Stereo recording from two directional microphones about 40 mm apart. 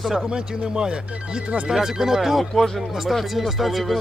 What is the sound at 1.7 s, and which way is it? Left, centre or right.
Speech, centre.